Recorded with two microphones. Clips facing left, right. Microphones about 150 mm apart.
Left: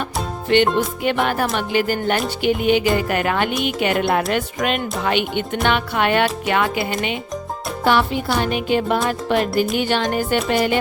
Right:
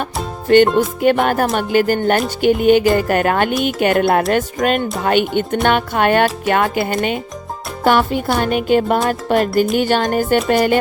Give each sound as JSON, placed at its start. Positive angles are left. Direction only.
{"t": 0.4, "sound": "music", "side_deg": -45}